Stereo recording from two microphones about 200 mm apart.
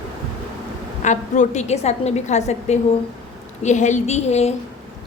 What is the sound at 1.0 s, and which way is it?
A woman's voice, 35° left (ahead or behind).